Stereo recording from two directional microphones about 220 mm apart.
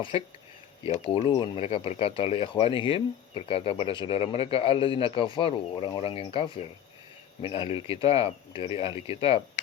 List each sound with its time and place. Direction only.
0.9 s speech: 25° left (ahead or behind)